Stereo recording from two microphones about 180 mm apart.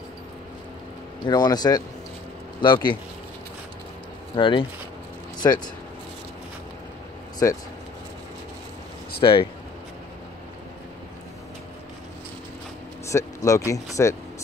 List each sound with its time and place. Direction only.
1.2 s speech: 25° left (ahead or behind)
4.4 s speech: 25° left (ahead or behind)
5.4 s speech: 15° left (ahead or behind)
7.4 s speech: 15° left (ahead or behind)
9.2 s speech: 30° left (ahead or behind)
13.1 s speech: 20° left (ahead or behind)